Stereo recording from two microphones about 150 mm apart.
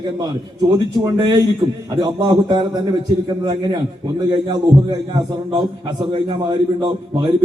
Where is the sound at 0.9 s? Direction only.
30° right (ahead or behind).